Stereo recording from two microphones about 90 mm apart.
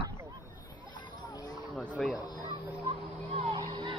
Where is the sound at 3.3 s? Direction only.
75° right (ahead or behind).